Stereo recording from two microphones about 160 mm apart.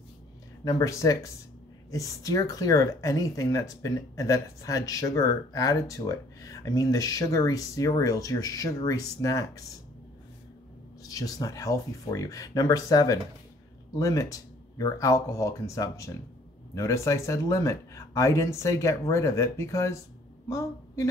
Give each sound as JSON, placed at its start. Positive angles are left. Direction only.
{"t": 0.7, "sound": "speech", "side_deg": 20}
{"t": 11.1, "sound": "a woman's voice", "side_deg": 20}